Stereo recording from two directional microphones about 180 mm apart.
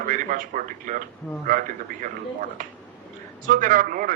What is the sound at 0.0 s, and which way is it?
A man's voice, 50° right (ahead or behind).